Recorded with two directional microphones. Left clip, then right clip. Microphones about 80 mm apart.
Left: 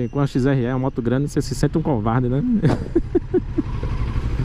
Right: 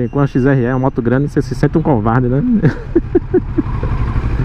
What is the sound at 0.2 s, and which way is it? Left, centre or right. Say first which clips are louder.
Speech: right 7 dB; centre.